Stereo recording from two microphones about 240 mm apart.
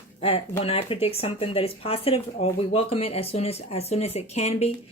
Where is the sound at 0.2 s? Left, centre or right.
Left.